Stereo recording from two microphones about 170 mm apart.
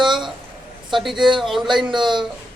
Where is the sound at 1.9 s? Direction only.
25° right (ahead or behind).